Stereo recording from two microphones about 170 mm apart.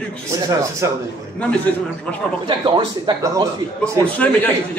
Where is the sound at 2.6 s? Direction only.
25° right (ahead or behind).